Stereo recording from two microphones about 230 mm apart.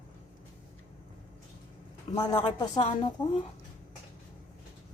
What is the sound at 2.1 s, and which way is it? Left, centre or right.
Speech, centre.